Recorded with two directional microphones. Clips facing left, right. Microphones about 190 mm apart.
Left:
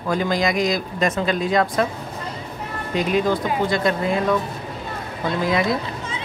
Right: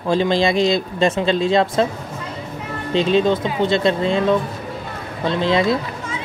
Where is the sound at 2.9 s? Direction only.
25° right (ahead or behind).